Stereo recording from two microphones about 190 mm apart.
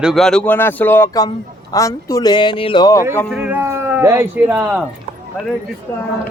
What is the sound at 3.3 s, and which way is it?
A man's voice, 10° right (ahead or behind).